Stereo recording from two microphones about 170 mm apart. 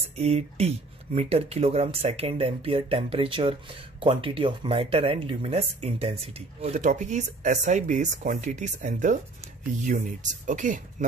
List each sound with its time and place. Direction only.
0.2 s speech: 40° right (ahead or behind)